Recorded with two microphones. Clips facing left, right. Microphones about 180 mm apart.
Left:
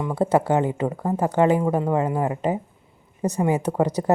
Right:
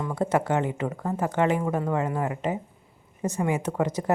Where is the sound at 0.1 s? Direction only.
30° left (ahead or behind).